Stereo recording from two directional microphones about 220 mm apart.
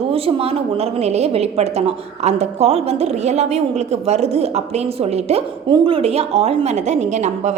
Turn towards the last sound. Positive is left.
turn(degrees=-30)  # may be behind; listen again after turning